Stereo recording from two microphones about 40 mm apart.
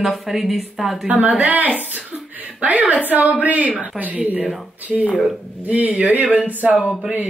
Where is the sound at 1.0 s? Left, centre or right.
Right.